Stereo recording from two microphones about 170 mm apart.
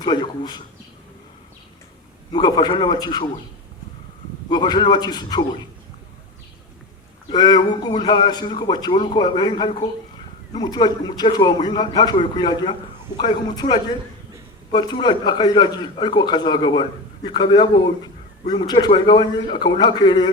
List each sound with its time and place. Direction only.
0.0 s a man's voice: 25° left (ahead or behind)
2.3 s a man's voice: 25° left (ahead or behind)
4.4 s a man's voice: 25° left (ahead or behind)
7.3 s a man's voice: 25° left (ahead or behind)